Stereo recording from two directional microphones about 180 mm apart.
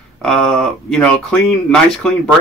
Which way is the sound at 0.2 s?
Centre (ahead or behind).